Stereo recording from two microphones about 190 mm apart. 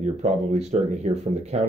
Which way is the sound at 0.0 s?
35° right (ahead or behind).